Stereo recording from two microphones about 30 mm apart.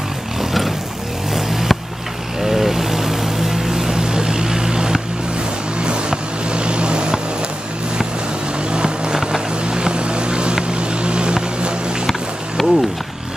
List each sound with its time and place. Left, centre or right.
1.3 s vehicle: centre; by 5.0 s right
5.8 s vehicle: right
8.7 s vehicle: right
9.8 s vehicle: right
12.6 s wild animals: centre